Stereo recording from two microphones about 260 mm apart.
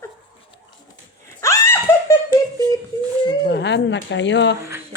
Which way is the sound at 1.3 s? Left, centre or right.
Centre.